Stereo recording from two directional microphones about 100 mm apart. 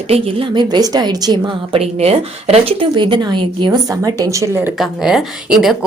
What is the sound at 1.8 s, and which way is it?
Speech, 85° right.